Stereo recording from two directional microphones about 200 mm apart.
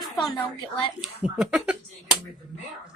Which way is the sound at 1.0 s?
5° right (ahead or behind).